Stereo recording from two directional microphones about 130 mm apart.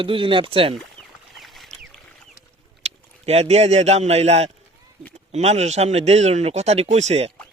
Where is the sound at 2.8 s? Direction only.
55° right (ahead or behind).